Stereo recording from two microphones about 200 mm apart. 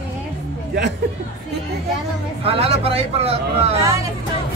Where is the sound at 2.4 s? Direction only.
30° right (ahead or behind).